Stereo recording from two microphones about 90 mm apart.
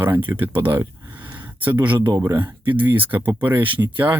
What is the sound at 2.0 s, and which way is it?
Speech, 60° right (ahead or behind).